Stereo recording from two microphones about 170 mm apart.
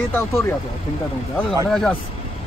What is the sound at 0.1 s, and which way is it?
Speech, 15° left (ahead or behind).